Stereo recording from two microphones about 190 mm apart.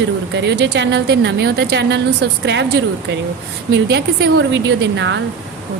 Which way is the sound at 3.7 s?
60° right (ahead or behind).